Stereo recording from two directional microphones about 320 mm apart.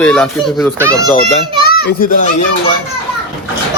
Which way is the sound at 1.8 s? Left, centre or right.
Left.